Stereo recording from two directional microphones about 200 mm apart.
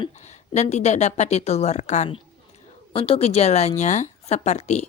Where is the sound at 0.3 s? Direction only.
35° left (ahead or behind).